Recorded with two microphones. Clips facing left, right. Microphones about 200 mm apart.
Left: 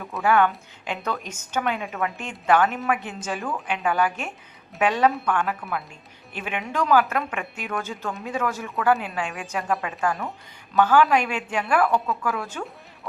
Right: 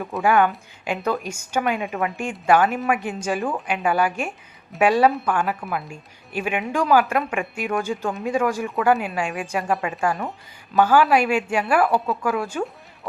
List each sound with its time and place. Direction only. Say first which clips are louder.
0.0 s speech: right 2 dB; 15° right (ahead or behind)
10.8 s speech: right 2 dB; 10° right (ahead or behind)
11.9 s a woman's voice: right 2 dB; 35° right (ahead or behind)
12.2 s speech: right 5 dB; 10° right (ahead or behind)